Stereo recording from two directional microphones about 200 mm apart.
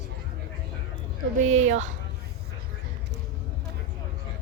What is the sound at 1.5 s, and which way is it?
Speech, 35° right (ahead or behind).